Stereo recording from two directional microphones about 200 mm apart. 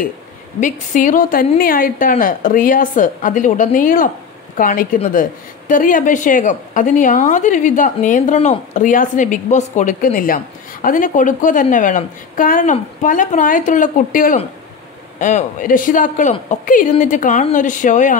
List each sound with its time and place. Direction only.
0.6 s a woman's voice: 40° left (ahead or behind)